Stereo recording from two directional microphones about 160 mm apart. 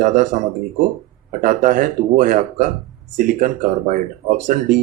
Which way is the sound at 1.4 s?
55° right (ahead or behind).